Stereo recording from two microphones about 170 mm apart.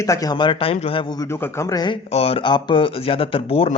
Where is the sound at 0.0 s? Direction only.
20° left (ahead or behind).